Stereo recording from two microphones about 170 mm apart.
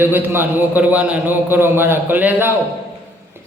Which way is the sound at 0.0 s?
10° right (ahead or behind).